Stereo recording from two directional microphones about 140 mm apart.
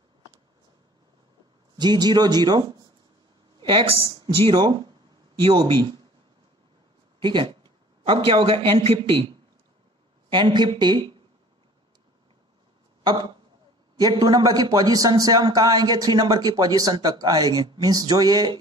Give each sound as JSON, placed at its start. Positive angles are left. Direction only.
{"t": 1.8, "sound": "speech", "side_deg": -30}
{"t": 7.2, "sound": "a man's voice", "side_deg": -35}
{"t": 10.3, "sound": "speech", "side_deg": -30}
{"t": 13.0, "sound": "a man's voice", "side_deg": -35}